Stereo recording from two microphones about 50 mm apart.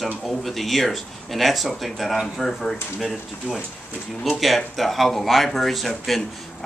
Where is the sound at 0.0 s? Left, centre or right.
Centre.